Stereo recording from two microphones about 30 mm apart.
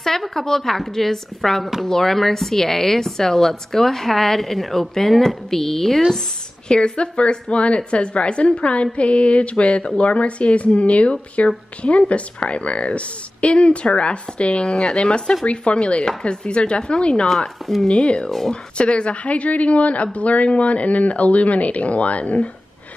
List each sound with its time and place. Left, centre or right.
0.3 s a woman's voice: centre
6.7 s a woman's voice: left
17.3 s a woman's voice: centre
17.8 s a woman's voice: left